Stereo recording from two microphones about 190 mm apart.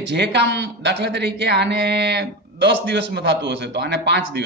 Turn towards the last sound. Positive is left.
turn(degrees=-60)  # may be behind; listen again after turning